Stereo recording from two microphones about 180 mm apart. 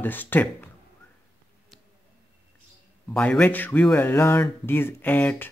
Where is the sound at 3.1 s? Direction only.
5° left (ahead or behind).